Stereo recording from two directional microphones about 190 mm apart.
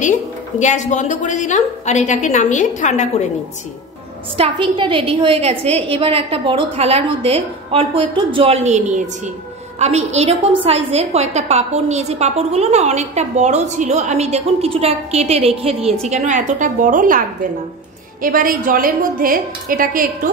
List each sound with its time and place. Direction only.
0.0 s a woman's voice: 40° left (ahead or behind)
4.4 s a woman's voice: 25° right (ahead or behind); by 17.2 s 45° right (ahead or behind)
18.2 s a woman's voice: 50° right (ahead or behind)